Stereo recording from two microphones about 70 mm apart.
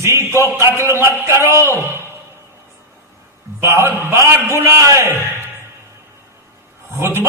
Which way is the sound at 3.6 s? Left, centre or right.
Right.